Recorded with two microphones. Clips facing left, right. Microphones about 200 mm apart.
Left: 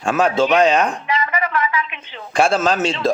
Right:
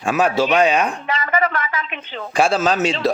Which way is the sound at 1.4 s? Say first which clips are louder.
Even; 35° right (ahead or behind).